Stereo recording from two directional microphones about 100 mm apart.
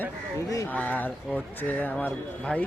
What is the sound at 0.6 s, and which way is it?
A man's voice, 15° left (ahead or behind).